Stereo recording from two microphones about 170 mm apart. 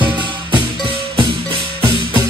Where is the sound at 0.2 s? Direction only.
30° right (ahead or behind).